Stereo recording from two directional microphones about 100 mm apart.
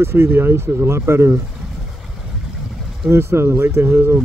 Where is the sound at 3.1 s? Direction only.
25° right (ahead or behind).